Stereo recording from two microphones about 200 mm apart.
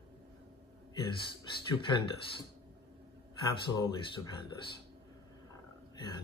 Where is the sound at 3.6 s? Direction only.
25° left (ahead or behind).